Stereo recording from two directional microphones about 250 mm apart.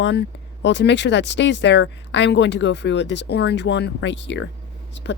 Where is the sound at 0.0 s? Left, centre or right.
Left.